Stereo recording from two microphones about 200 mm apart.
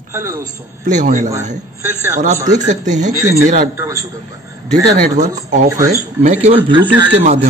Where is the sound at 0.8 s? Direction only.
40° right (ahead or behind).